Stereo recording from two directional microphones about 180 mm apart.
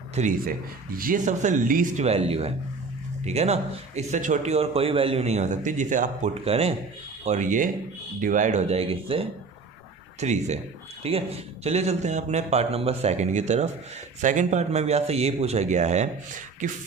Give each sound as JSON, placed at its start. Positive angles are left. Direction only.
{"t": 0.1, "sound": "a man's voice", "side_deg": -45}
{"t": 7.3, "sound": "a man's voice", "side_deg": -45}